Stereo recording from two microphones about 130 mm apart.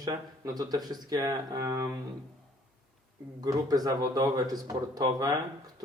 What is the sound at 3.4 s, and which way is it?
Speech, 30° right (ahead or behind).